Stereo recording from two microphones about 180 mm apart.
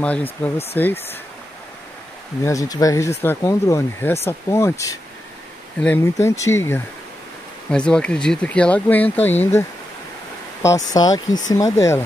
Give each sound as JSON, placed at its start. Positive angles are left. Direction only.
{"t": 0.0, "sound": "speech", "side_deg": 10}
{"t": 2.4, "sound": "speech", "side_deg": 20}
{"t": 10.9, "sound": "speech", "side_deg": 20}